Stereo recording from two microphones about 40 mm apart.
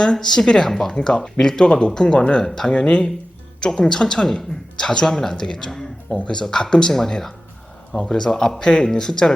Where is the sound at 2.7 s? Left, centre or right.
Left.